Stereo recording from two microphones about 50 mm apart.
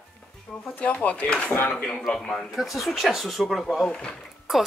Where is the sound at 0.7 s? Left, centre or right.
Left.